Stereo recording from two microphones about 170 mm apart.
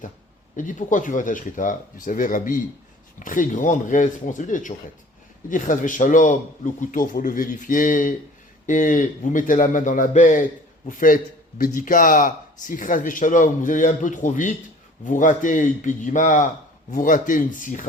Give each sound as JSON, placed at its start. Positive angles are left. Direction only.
{"t": 0.5, "sound": "a man's voice", "side_deg": 50}